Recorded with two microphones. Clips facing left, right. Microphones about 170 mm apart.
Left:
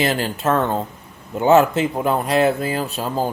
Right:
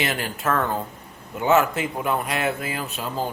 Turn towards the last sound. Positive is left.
turn(degrees=35)  # may be behind; listen again after turning